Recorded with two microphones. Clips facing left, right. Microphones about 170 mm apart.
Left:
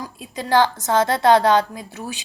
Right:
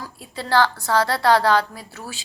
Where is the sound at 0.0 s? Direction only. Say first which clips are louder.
Left 3 dB; 15° left (ahead or behind).